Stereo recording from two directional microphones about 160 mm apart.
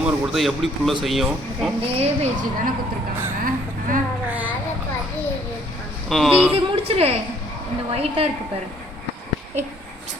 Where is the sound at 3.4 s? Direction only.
60° right (ahead or behind).